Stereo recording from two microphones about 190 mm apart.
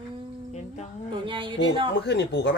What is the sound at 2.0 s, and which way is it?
Speech, 65° left (ahead or behind).